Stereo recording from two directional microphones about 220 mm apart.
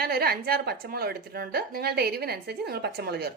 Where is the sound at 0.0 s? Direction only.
45° right (ahead or behind).